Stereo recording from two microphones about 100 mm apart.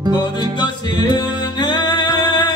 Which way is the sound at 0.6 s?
45° left (ahead or behind).